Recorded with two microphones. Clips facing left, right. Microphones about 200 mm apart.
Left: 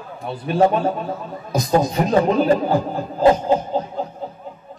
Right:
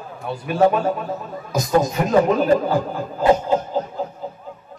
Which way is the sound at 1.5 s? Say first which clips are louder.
Even; 30° left (ahead or behind).